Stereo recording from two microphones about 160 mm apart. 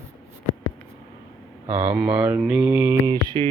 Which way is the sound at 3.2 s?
30° right (ahead or behind).